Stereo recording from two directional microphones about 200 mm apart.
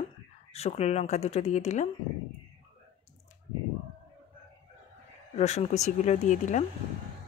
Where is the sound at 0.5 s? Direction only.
30° left (ahead or behind).